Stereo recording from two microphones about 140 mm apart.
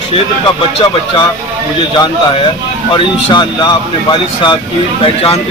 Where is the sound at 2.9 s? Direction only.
35° left (ahead or behind).